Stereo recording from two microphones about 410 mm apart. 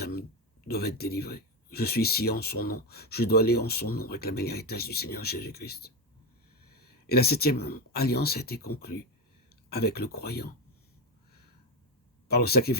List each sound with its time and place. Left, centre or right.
0.0 s a sound: left
0.7 s speech: left
7.1 s speech: left
12.3 s speech: left